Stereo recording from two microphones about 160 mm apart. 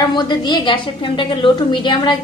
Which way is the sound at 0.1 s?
30° left (ahead or behind).